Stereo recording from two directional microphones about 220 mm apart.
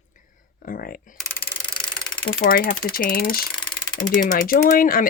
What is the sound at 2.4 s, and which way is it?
Speech, 40° left (ahead or behind).